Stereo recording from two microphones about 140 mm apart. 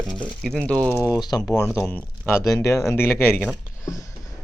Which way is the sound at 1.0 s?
25° left (ahead or behind).